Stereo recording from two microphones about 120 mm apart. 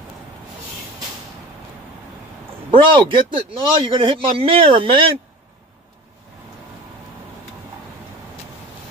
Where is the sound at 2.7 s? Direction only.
45° right (ahead or behind).